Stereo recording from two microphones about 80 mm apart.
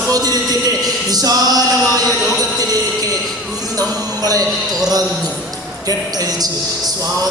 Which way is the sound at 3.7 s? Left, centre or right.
Right.